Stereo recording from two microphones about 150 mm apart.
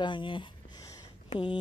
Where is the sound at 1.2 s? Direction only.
35° left (ahead or behind).